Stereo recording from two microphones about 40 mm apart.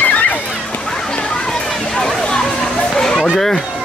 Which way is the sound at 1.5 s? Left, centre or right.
Centre.